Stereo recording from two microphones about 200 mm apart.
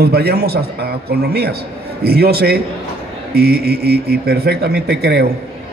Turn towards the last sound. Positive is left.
turn(degrees=-55)  # may be behind; listen again after turning